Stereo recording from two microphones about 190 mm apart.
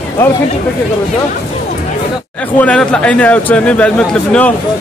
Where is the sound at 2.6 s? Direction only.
5° left (ahead or behind).